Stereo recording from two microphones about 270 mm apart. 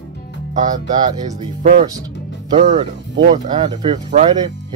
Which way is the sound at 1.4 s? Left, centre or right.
Right.